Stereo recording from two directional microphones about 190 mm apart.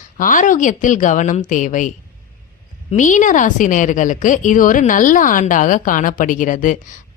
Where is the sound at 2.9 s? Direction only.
40° left (ahead or behind).